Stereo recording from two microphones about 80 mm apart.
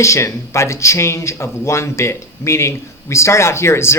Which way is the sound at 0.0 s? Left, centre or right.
Left.